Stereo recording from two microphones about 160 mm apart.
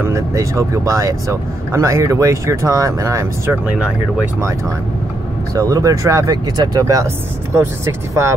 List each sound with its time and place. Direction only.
0.1 s speech: 20° right (ahead or behind)
5.5 s speech: 20° right (ahead or behind)